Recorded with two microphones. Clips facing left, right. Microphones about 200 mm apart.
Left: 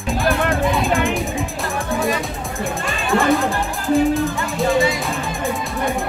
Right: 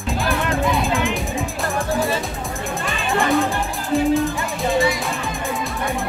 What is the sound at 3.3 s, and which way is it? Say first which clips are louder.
Music: even; centre (ahead or behind).